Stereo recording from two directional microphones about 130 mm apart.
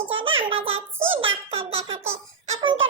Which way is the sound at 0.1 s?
45° right (ahead or behind).